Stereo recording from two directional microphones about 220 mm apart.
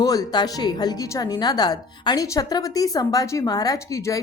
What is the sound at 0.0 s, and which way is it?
Speech, 15° left (ahead or behind).